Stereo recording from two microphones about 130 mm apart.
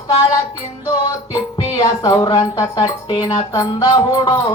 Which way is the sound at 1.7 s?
30° left (ahead or behind).